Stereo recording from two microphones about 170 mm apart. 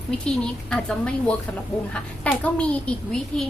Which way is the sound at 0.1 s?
5° left (ahead or behind).